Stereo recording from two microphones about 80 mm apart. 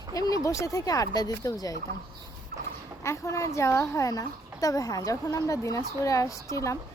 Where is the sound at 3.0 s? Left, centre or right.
Left.